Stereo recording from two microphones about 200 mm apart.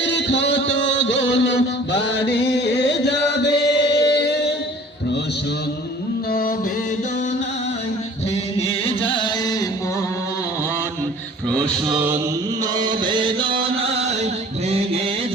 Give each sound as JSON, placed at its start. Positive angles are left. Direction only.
{"t": 0.0, "sound": "music", "side_deg": 65}
{"t": 8.5, "sound": "music", "side_deg": 25}
{"t": 11.4, "sound": "music", "side_deg": 5}
{"t": 12.7, "sound": "chant", "side_deg": -20}